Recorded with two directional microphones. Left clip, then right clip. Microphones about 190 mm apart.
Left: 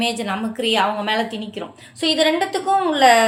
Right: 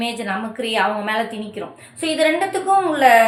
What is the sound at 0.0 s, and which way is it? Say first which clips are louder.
A woman's voice: left 1 dB; 45° left (ahead or behind).